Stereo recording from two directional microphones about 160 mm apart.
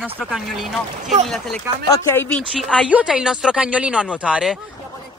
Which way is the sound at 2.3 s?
5° left (ahead or behind).